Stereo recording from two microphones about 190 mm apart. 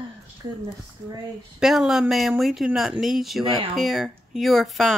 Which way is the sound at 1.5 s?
Centre (ahead or behind).